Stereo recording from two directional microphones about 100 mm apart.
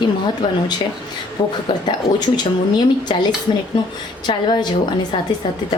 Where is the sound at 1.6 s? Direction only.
45° left (ahead or behind).